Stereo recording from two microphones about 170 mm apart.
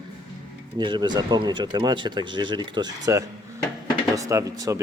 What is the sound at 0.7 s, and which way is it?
Speech, 25° right (ahead or behind).